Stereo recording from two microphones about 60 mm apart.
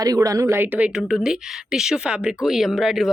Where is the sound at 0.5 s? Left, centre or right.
Right.